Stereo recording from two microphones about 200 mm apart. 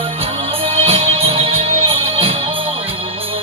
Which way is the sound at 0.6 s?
30° right (ahead or behind).